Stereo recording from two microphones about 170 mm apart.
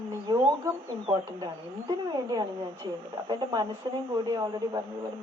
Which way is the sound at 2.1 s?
25° right (ahead or behind).